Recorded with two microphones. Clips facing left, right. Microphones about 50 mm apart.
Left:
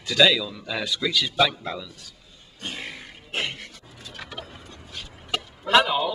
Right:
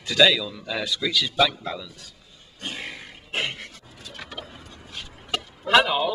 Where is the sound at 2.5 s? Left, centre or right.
Centre.